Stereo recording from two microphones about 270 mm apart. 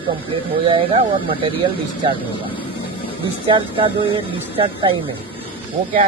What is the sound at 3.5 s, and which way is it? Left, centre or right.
Speech, centre.